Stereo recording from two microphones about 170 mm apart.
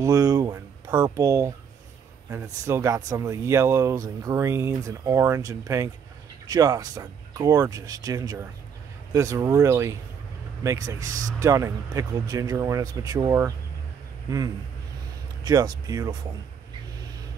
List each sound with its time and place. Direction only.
0.0 s speech: 20° right (ahead or behind)
15.4 s speech: 25° right (ahead or behind)